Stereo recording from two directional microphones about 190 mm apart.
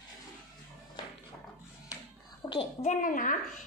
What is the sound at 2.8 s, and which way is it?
Speech, 45° left (ahead or behind).